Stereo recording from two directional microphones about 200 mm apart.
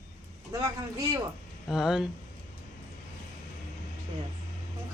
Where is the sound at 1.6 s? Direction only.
Centre (ahead or behind).